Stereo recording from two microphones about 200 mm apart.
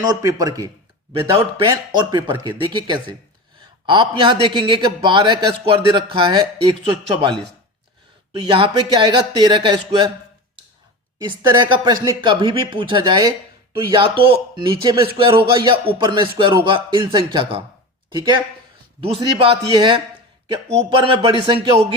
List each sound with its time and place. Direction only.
0.0 s speech: 15° right (ahead or behind)
2.0 s a man's voice: 20° right (ahead or behind)
8.4 s a man's voice: 25° right (ahead or behind)
11.2 s a man's voice: 20° right (ahead or behind)